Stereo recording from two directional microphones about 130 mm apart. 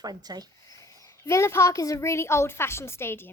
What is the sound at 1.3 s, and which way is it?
A woman's voice, 20° left (ahead or behind).